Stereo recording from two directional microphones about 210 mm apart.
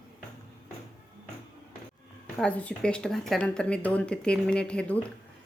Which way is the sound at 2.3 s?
5° left (ahead or behind).